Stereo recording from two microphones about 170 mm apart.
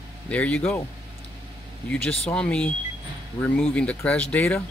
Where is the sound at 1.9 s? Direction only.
5° left (ahead or behind).